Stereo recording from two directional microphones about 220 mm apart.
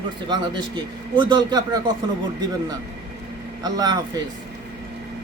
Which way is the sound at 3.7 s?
20° right (ahead or behind).